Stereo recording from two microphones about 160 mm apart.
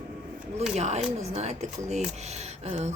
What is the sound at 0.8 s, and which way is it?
A woman's voice, 45° right (ahead or behind).